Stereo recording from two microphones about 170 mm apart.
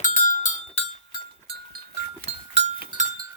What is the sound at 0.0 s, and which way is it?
Cowbell, 50° left (ahead or behind).